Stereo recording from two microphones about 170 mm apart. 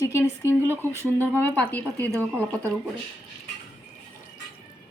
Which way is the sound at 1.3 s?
10° left (ahead or behind).